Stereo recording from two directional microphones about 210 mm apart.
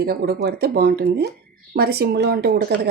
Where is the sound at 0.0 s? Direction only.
45° right (ahead or behind).